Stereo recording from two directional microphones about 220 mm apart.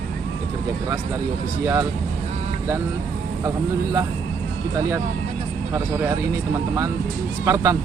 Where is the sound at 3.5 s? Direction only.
15° right (ahead or behind).